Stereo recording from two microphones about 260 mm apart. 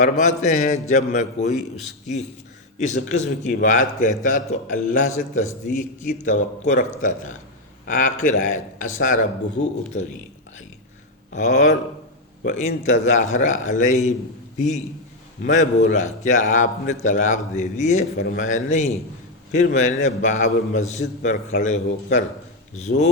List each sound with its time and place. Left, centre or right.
0.0 s a man's voice: left
11.3 s a man's voice: left
15.4 s a man's voice: left